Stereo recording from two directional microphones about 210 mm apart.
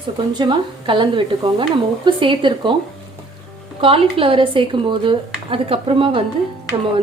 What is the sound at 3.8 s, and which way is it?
Speech, 25° right (ahead or behind).